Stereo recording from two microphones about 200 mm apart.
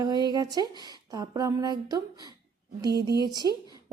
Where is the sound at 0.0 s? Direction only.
20° right (ahead or behind).